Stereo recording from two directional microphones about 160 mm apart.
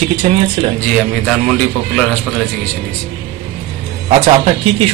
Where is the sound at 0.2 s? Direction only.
40° right (ahead or behind).